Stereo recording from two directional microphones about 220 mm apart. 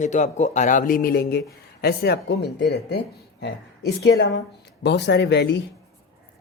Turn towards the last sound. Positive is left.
turn(degrees=50)  # may be behind; listen again after turning